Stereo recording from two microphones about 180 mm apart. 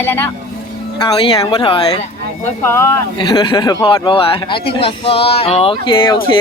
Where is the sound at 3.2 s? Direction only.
25° left (ahead or behind).